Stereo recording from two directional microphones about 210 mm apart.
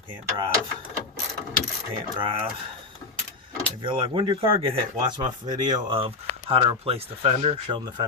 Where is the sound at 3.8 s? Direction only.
25° right (ahead or behind).